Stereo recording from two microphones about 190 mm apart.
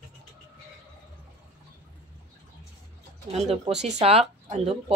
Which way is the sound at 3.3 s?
35° right (ahead or behind).